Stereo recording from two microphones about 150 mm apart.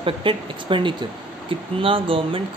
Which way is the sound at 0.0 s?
35° right (ahead or behind).